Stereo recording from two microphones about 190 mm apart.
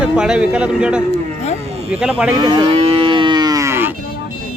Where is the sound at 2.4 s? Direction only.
25° right (ahead or behind).